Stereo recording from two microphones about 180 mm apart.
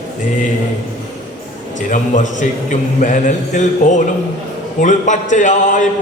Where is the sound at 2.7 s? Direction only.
45° left (ahead or behind).